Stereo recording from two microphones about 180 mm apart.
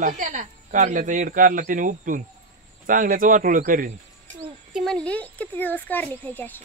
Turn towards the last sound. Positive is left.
turn(degrees=10)  # may be behind; listen again after turning